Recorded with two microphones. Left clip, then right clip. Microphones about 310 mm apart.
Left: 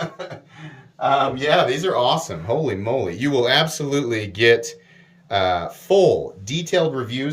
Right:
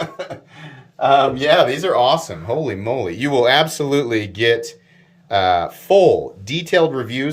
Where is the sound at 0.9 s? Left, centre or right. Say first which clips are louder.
Right 5 dB; right.